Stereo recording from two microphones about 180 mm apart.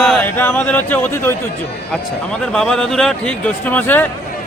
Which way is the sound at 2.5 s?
5° left (ahead or behind).